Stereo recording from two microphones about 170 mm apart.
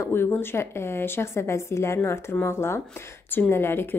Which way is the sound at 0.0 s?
15° left (ahead or behind).